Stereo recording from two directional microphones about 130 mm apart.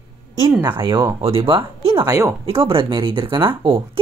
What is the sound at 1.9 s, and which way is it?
Speech, 25° right (ahead or behind).